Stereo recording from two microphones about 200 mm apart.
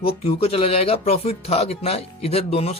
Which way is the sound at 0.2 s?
30° left (ahead or behind).